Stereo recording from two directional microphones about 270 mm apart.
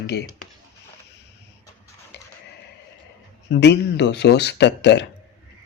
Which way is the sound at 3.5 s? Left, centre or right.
Left.